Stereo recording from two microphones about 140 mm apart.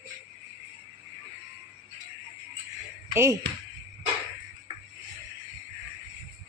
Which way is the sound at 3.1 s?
20° right (ahead or behind).